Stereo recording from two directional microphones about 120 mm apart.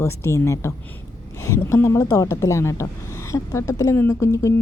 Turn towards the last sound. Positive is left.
turn(degrees=25)  # may be behind; listen again after turning